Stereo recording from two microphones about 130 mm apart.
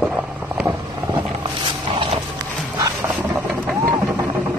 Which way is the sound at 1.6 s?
45° right (ahead or behind).